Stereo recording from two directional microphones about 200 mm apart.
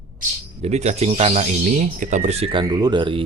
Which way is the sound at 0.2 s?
35° right (ahead or behind).